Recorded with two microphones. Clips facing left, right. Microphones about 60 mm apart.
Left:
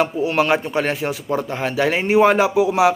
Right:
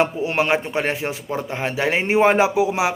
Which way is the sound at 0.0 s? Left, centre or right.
Right.